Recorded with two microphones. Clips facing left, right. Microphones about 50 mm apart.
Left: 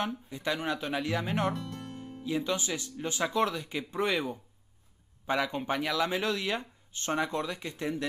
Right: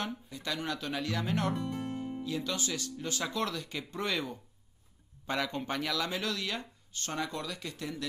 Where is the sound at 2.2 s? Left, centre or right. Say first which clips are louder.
Left 7 dB; left.